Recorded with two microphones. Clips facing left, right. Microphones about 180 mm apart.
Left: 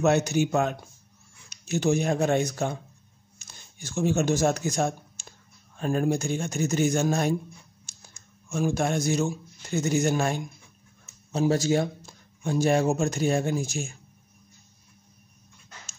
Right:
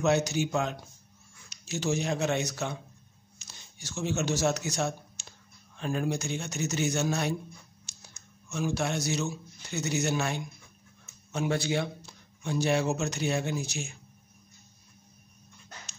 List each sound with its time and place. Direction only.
0.0 s speech: 60° left (ahead or behind)
8.5 s speech: 50° left (ahead or behind)